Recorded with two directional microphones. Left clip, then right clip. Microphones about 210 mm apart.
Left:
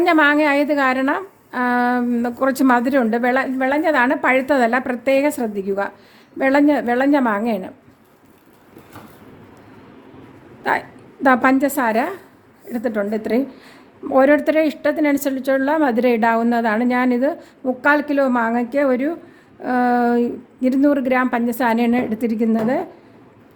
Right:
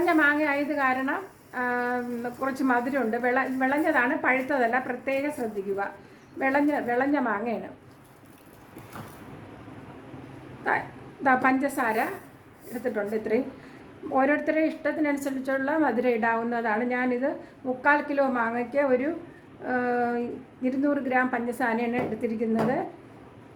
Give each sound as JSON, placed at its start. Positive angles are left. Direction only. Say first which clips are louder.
{"t": 0.0, "sound": "a woman's voice", "louder": "left 8 dB", "side_deg": 55}
{"t": 10.6, "sound": "a woman's voice", "louder": "left 7 dB", "side_deg": 50}